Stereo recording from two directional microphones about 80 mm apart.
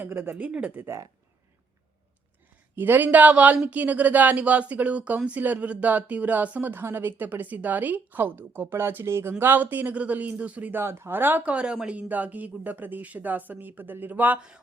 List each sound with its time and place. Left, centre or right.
0.0 s speech: right
2.7 s speech: right